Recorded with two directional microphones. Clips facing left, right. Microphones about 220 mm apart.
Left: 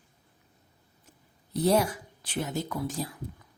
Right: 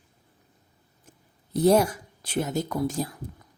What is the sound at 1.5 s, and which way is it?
Speech, 45° right (ahead or behind).